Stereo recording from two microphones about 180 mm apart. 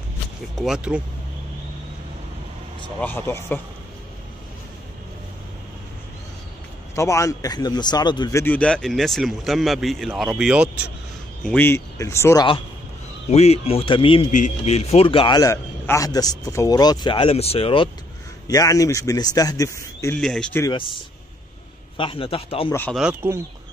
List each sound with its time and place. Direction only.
0.6 s a man's voice: 5° right (ahead or behind)
3.0 s speech: 10° left (ahead or behind)
7.0 s a man's voice: 15° left (ahead or behind); by 10.7 s 5° right (ahead or behind)
11.4 s speech: 10° left (ahead or behind)
13.3 s a man's voice: 35° left (ahead or behind)
18.5 s a man's voice: 20° left (ahead or behind)
20.2 s a man's voice: 5° left (ahead or behind)
20.6 s a man's voice: 30° left (ahead or behind)
22.7 s speech: 10° left (ahead or behind)
22.9 s a man's voice: 5° right (ahead or behind)